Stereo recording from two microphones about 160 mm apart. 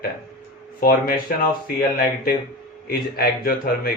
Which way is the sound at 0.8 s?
65° left (ahead or behind).